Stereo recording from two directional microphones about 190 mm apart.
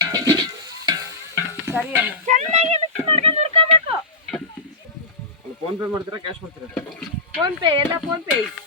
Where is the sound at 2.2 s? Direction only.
40° right (ahead or behind).